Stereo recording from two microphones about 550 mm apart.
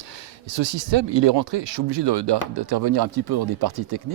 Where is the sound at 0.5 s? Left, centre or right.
Right.